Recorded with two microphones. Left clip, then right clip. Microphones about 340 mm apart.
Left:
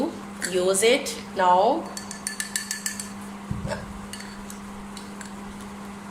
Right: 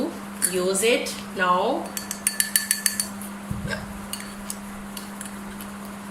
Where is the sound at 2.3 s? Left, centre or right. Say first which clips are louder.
Right 6 dB; centre.